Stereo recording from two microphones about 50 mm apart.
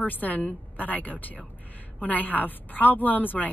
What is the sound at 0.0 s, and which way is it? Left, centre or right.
A woman's voice, left.